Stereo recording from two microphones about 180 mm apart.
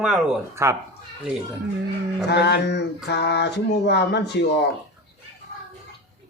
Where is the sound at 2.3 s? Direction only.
70° left (ahead or behind).